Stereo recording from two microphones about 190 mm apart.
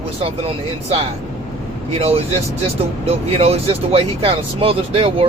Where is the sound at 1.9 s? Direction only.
30° right (ahead or behind).